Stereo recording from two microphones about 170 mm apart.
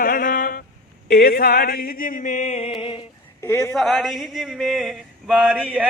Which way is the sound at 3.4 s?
15° left (ahead or behind).